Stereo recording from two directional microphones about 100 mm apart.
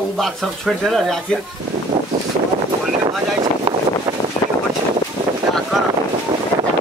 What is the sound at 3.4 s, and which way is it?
Boat, 50° right (ahead or behind).